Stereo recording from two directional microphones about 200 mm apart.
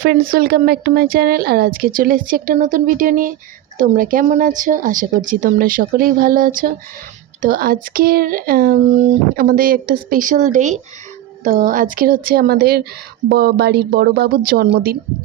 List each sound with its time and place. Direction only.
0.0 s a woman's voice: 45° right (ahead or behind)